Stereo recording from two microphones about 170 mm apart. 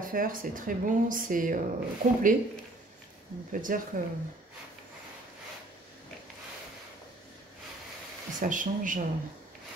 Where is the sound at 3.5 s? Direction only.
55° right (ahead or behind).